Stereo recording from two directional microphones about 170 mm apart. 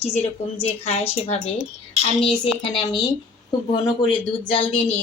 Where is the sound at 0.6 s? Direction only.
35° left (ahead or behind).